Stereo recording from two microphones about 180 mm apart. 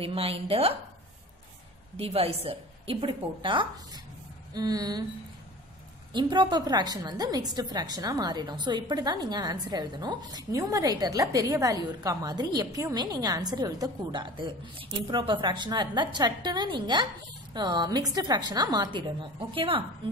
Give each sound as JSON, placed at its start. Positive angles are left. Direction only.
{"t": 0.0, "sound": "a woman's voice", "side_deg": -30}
{"t": 2.0, "sound": "a woman's voice", "side_deg": -35}
{"t": 6.1, "sound": "a woman's voice", "side_deg": -25}